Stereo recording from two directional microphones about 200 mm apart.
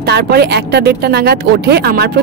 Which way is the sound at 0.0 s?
55° right (ahead or behind).